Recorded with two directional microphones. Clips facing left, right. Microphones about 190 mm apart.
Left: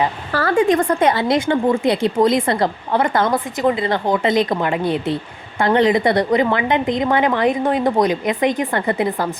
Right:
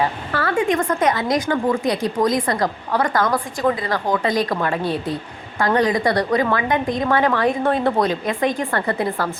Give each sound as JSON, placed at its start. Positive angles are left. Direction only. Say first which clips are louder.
{"t": 0.3, "sound": "a woman's voice", "louder": "left 4 dB", "side_deg": 35}